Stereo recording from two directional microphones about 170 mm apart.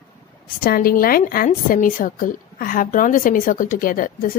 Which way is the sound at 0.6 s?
60° left (ahead or behind).